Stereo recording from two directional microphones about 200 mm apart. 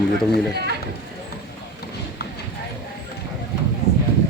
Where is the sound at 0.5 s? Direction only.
55° right (ahead or behind).